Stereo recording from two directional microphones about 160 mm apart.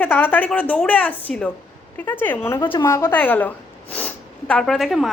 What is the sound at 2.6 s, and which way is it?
Speech, 30° left (ahead or behind).